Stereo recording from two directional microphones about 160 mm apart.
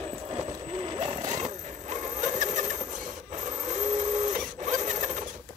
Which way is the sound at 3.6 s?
45° right (ahead or behind).